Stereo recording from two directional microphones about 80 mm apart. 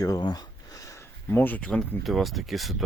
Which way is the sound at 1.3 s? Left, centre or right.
Left.